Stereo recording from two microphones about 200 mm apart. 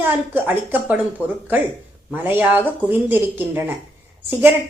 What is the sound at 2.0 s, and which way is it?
A woman's voice, 10° right (ahead or behind).